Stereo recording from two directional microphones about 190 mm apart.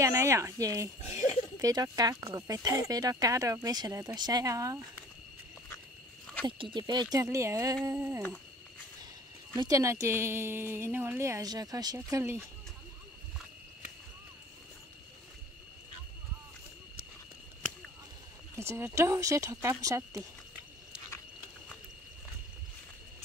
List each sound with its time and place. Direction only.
0.0 s speech: 15° right (ahead or behind)
1.0 s a sound: 35° left (ahead or behind)
1.6 s speech: 20° right (ahead or behind)
6.4 s a woman's voice: 25° right (ahead or behind)
9.6 s a woman's voice: 15° right (ahead or behind)
18.6 s a woman's voice: 15° right (ahead or behind)